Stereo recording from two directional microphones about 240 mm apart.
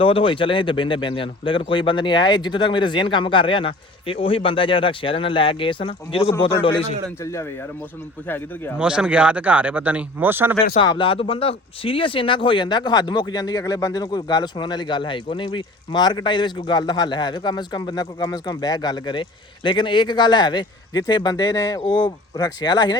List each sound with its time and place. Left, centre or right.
0.0 s speech: left
6.7 s speech: centre
8.8 s speech: centre
10.8 s speech: left